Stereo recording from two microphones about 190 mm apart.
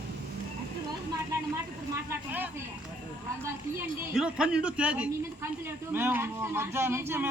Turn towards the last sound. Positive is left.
turn(degrees=-10)  # may be behind; listen again after turning